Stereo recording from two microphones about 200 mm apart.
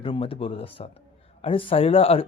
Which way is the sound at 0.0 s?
25° left (ahead or behind).